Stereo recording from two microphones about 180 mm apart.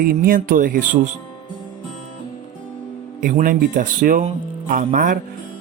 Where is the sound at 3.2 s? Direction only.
50° right (ahead or behind).